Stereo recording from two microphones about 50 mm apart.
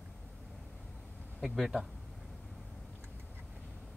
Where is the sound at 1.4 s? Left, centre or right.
Centre.